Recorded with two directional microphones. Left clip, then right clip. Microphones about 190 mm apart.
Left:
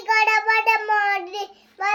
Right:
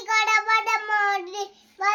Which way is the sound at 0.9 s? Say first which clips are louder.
Left 2 dB; 20° right (ahead or behind).